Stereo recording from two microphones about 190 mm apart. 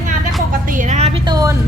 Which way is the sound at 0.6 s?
45° right (ahead or behind).